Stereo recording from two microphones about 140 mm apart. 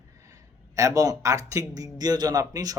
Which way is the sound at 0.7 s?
25° right (ahead or behind).